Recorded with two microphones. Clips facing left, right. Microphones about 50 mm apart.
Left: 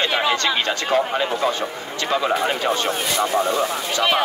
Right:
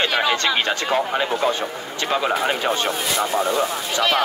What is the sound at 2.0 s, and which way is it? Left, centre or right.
Speech, centre.